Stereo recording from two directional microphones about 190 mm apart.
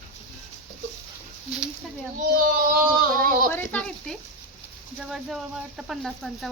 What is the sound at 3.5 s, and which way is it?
Speech, 10° left (ahead or behind).